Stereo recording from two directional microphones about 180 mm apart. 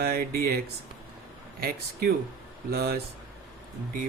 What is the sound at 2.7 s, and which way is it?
Speech, 60° right (ahead or behind).